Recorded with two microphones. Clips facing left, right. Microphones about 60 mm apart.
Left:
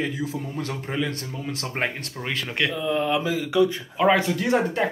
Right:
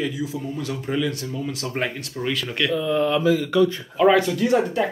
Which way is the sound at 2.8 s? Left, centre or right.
Centre.